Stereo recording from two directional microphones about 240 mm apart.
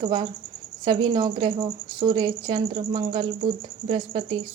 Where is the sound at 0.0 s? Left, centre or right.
Centre.